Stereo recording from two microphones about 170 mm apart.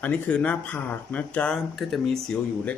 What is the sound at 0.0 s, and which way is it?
Speech, 10° left (ahead or behind).